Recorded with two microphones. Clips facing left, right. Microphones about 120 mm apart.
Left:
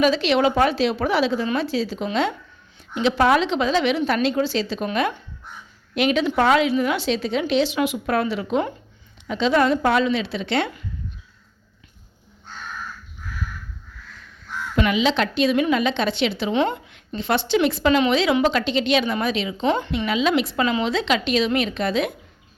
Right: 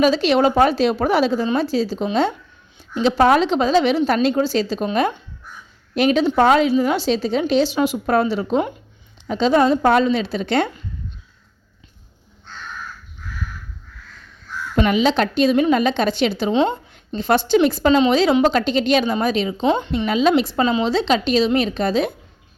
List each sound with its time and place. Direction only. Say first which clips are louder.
0.0 s a woman's voice: right 3 dB; 40° right (ahead or behind)
5.9 s a woman's voice: right 4 dB; 40° right (ahead or behind)
14.8 s a woman's voice: right 3 dB; 40° right (ahead or behind)
16.5 s a woman's voice: right 3 dB; 20° right (ahead or behind)
17.2 s a woman's voice: right 4 dB; 40° right (ahead or behind)
19.6 s a woman's voice: right 2 dB; 20° right (ahead or behind)
20.1 s a woman's voice: right 5 dB; 40° right (ahead or behind)